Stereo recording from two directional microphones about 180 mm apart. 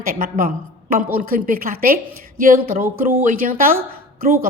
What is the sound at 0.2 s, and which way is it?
Speech, 55° right (ahead or behind).